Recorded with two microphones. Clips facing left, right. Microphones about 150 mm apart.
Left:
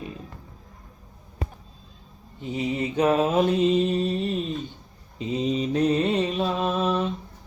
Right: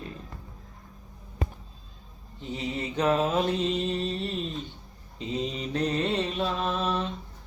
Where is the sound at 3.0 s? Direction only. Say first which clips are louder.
Left 4 dB; 15° left (ahead or behind).